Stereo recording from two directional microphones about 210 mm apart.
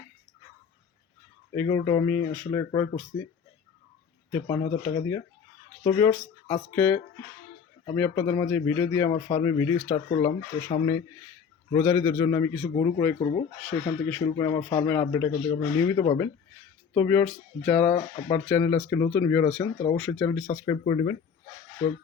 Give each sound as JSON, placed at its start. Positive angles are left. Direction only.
{"t": 1.5, "sound": "speech", "side_deg": 15}
{"t": 4.3, "sound": "speech", "side_deg": 15}
{"t": 11.7, "sound": "speech", "side_deg": 10}
{"t": 13.6, "sound": "speech", "side_deg": 5}
{"t": 14.3, "sound": "speech", "side_deg": 20}
{"t": 20.7, "sound": "speech", "side_deg": 25}